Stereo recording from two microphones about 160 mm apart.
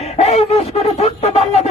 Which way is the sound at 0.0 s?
40° left (ahead or behind).